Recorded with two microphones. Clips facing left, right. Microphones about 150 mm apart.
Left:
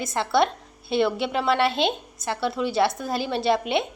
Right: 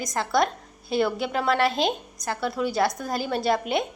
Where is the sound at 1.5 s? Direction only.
30° left (ahead or behind).